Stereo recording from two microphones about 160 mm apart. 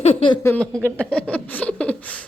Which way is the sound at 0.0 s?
35° left (ahead or behind).